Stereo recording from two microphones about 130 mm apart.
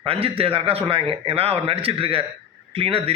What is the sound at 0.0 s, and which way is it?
A man's voice, 45° right (ahead or behind).